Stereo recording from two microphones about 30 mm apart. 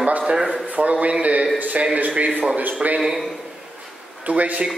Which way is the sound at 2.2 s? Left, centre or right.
Right.